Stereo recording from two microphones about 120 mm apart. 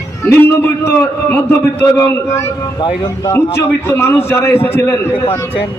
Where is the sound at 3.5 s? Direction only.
20° left (ahead or behind).